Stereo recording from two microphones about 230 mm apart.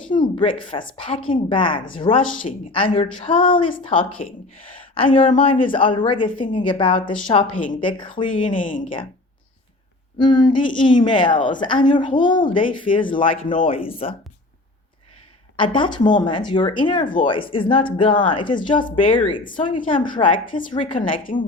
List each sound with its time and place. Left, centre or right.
0.1 s a woman's voice: left
8.5 s speech: left
10.2 s a woman's voice: centre
15.5 s a woman's voice: left